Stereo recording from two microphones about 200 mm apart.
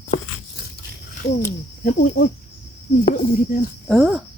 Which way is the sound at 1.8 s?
45° left (ahead or behind).